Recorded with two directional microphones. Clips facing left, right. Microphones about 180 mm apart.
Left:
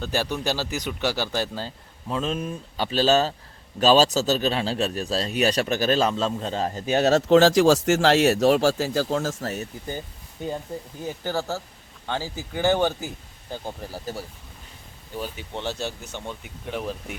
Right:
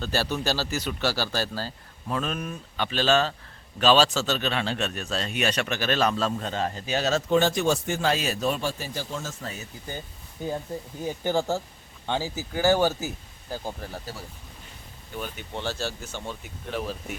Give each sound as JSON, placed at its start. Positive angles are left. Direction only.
{"t": 0.0, "sound": "a man's voice", "side_deg": 15}
{"t": 6.0, "sound": "a man's voice", "side_deg": 25}
{"t": 6.8, "sound": "speech", "side_deg": 55}
{"t": 11.0, "sound": "speech", "side_deg": -15}
{"t": 15.5, "sound": "a man's voice", "side_deg": 20}